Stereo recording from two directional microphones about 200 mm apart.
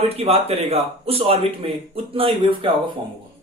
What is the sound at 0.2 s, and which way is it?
A man's voice, 30° right (ahead or behind).